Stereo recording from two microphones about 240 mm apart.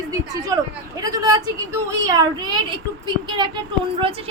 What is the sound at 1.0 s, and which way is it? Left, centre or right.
A woman's voice, centre.